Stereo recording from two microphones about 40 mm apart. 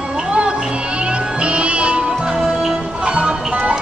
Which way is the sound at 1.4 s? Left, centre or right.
Right.